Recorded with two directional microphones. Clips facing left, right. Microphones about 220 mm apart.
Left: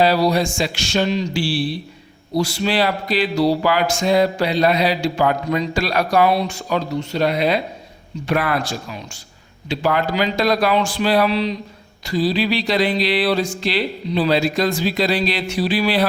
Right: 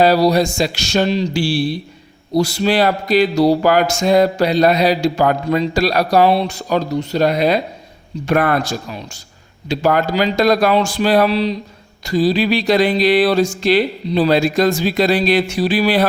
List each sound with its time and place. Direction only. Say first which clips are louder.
0.0 s speech: right 4 dB; 40° right (ahead or behind)
12.0 s speech: right 4 dB; 45° right (ahead or behind)